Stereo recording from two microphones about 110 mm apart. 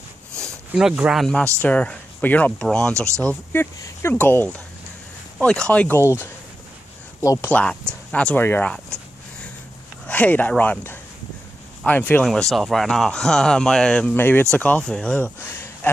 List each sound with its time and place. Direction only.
0.7 s speech: 5° right (ahead or behind)
1.2 s speech: 5° left (ahead or behind)
3.5 s speech: 20° left (ahead or behind)
7.2 s speech: 25° left (ahead or behind)
7.5 s speech: 10° left (ahead or behind)
8.4 s a sound: 15° left (ahead or behind)
10.0 s speech: 15° left (ahead or behind)
11.8 s speech: 15° left (ahead or behind)
12.3 s speech: centre (ahead or behind)
14.1 s speech: 20° left (ahead or behind)